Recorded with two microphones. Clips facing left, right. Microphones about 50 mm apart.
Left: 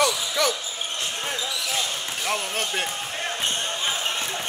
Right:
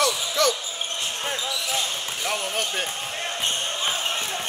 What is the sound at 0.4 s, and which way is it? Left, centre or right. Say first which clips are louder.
Basketball bounce: right 2 dB; centre.